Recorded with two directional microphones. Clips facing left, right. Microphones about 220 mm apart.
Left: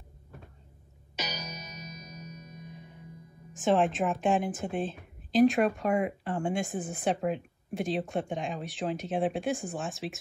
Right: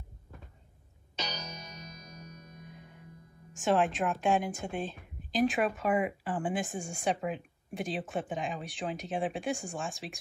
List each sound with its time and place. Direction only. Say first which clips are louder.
1.9 s music: left 4 dB; 20° left (ahead or behind)
3.5 s a woman's voice: left 2 dB; centre (ahead or behind)